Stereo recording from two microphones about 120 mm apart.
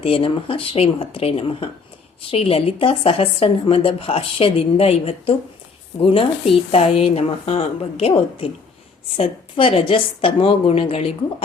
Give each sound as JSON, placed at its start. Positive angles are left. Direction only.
{"t": 0.0, "sound": "speech", "side_deg": 50}
{"t": 9.1, "sound": "speech", "side_deg": 55}